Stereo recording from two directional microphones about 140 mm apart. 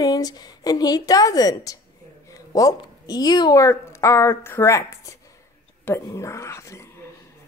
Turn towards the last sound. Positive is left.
turn(degrees=20)  # may be behind; listen again after turning